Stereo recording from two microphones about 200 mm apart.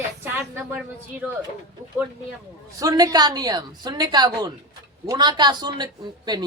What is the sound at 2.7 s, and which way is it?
A woman's voice, 15° right (ahead or behind).